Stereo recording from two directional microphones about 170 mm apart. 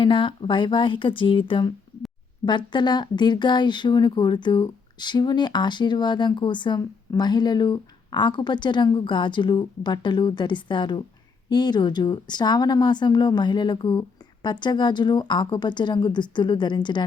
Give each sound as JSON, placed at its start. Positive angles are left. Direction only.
{"t": 0.0, "sound": "speech", "side_deg": 30}